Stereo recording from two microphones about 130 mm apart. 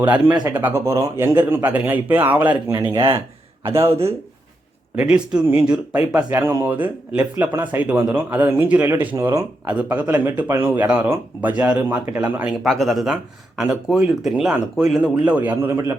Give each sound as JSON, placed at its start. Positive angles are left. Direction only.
{"t": 0.4, "sound": "speech", "side_deg": -20}
{"t": 2.9, "sound": "speech", "side_deg": -35}
{"t": 3.7, "sound": "a man's voice", "side_deg": -20}
{"t": 4.9, "sound": "speech", "side_deg": -10}
{"t": 12.5, "sound": "speech", "side_deg": 0}